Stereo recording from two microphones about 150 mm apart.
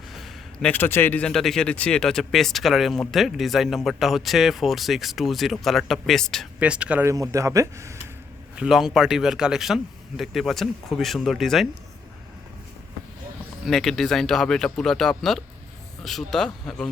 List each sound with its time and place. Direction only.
0.1 s a sound: centre (ahead or behind)
0.7 s speech: 15° left (ahead or behind)
6.6 s speech: 10° right (ahead or behind)
7.1 s speech: 20° right (ahead or behind)
8.5 s speech: 5° right (ahead or behind)
13.7 s speech: centre (ahead or behind)